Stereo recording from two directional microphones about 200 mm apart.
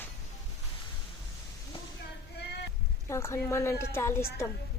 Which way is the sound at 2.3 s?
55° left (ahead or behind).